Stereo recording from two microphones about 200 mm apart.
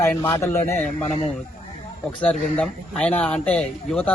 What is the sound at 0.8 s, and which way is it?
Speech, 35° left (ahead or behind).